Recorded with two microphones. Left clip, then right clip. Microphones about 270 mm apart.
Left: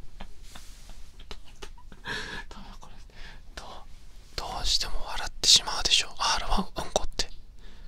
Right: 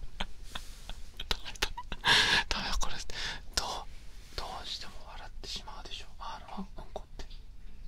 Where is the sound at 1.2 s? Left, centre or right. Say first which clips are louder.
Right 12 dB; right.